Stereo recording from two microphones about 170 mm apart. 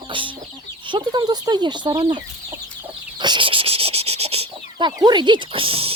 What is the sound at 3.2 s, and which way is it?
Fowl, 25° right (ahead or behind).